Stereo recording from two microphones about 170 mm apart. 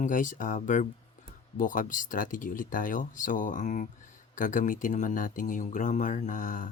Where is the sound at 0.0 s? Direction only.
50° left (ahead or behind).